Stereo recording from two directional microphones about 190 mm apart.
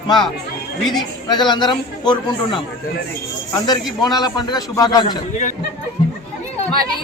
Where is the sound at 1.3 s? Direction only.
25° left (ahead or behind).